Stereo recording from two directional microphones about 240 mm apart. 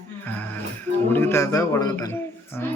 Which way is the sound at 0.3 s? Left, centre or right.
Centre.